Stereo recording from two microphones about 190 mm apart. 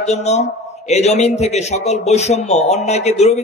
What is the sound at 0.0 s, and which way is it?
Speech, 35° left (ahead or behind).